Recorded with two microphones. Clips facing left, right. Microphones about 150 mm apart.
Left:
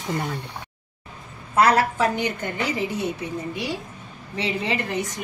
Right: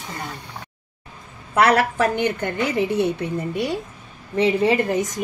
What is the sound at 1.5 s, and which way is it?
A woman's voice, 70° right (ahead or behind).